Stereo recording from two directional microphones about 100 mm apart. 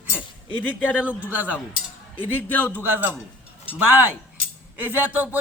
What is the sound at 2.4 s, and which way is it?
Speech, 20° left (ahead or behind).